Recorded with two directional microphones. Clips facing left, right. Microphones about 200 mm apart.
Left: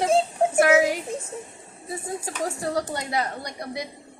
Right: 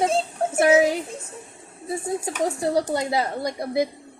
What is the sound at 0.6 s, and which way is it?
Speech, 25° right (ahead or behind).